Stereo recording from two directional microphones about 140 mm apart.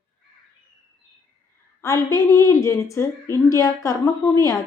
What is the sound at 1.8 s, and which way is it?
A woman's voice, 20° left (ahead or behind).